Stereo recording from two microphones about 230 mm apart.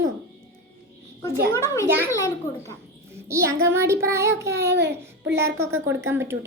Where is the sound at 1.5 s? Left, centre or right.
Centre.